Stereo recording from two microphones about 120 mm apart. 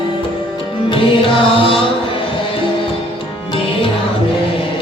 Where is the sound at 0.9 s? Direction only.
45° left (ahead or behind).